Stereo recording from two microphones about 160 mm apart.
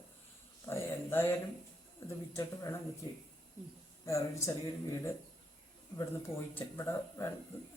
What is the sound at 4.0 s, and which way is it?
Speech, 20° left (ahead or behind).